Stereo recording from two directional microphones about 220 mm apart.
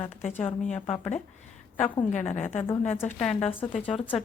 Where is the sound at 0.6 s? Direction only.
5° left (ahead or behind).